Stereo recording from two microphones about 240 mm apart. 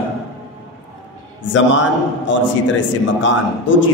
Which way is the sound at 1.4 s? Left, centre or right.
Left.